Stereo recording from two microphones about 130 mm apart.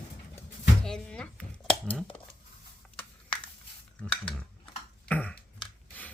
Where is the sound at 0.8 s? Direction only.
5° left (ahead or behind).